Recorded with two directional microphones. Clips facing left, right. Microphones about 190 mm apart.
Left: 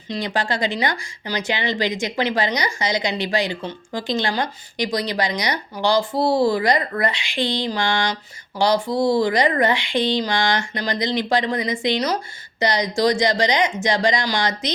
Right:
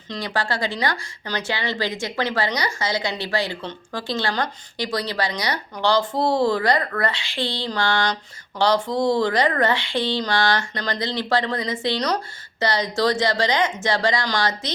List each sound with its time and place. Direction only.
0.1 s a woman's voice: 20° left (ahead or behind)